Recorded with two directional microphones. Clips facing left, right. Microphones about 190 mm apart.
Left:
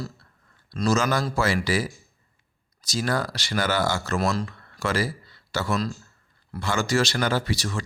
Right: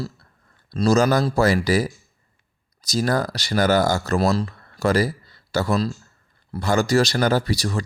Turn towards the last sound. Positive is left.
turn(degrees=-40)  # may be behind; listen again after turning